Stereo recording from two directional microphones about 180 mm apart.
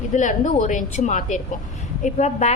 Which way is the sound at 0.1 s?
45° left (ahead or behind).